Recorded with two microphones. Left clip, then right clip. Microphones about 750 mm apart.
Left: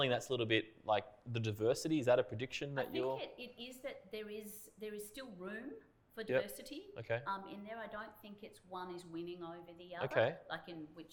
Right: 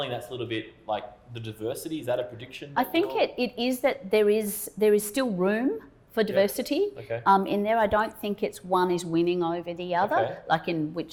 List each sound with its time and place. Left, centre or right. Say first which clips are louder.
0.0 s speech: right 4 dB; left
2.7 s a woman's voice: right 16 dB; right